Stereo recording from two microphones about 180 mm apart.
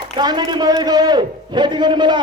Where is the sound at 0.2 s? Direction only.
25° right (ahead or behind).